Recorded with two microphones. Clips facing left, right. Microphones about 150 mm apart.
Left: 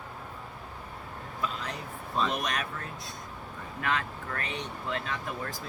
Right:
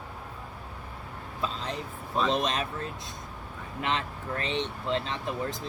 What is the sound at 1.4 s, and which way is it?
Vehicle, 30° right (ahead or behind).